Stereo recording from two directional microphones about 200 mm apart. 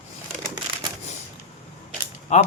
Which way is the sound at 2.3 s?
35° left (ahead or behind).